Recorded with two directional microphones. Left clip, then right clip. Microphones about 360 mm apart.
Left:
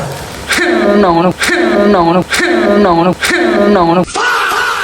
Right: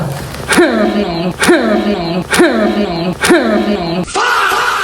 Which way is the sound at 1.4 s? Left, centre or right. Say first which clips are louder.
Left 1 dB; centre.